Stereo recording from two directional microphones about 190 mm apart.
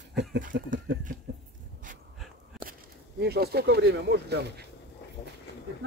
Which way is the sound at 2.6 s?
55° right (ahead or behind).